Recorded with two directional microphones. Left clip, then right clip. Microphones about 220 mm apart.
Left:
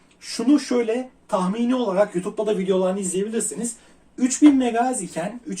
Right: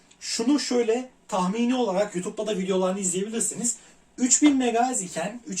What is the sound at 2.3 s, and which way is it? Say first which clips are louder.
Speech: left 5 dB; 10° right (ahead or behind).